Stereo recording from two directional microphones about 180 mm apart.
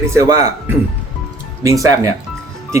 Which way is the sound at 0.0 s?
15° right (ahead or behind).